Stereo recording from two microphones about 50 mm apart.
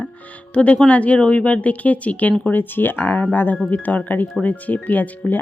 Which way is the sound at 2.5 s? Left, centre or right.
Left.